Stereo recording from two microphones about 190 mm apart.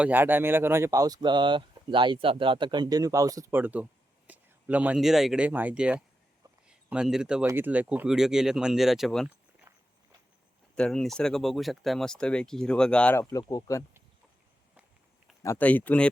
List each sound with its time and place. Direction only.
0.0 s speech: 10° right (ahead or behind)
10.8 s speech: 5° left (ahead or behind)
15.4 s speech: 10° left (ahead or behind)